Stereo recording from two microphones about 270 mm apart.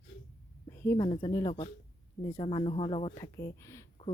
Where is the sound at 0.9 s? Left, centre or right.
Centre.